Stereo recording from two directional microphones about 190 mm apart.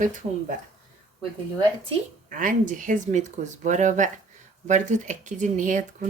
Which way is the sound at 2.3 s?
45° right (ahead or behind).